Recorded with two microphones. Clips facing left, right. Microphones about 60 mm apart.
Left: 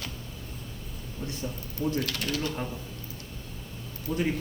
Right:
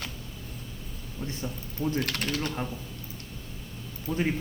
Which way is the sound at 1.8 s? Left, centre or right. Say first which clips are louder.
Even; right.